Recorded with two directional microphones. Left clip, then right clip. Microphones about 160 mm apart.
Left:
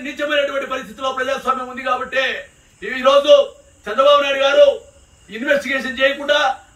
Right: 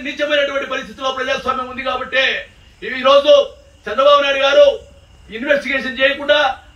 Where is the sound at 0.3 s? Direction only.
20° left (ahead or behind).